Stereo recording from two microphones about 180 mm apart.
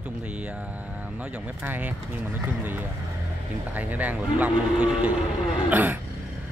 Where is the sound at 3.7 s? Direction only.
10° right (ahead or behind).